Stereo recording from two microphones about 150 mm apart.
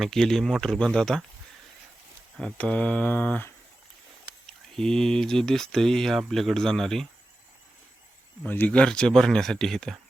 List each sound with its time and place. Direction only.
0.0 s speech: centre (ahead or behind)
2.4 s speech: 5° left (ahead or behind)
8.4 s speech: 10° left (ahead or behind)